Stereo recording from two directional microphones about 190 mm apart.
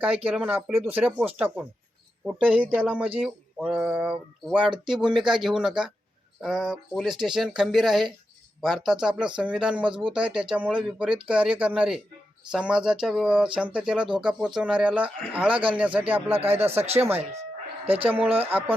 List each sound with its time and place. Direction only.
0.3 s speech: 5° right (ahead or behind)
16.8 s speech: 35° right (ahead or behind)
17.8 s speech: 10° right (ahead or behind)